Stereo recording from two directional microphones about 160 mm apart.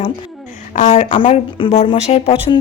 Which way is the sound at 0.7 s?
45° left (ahead or behind).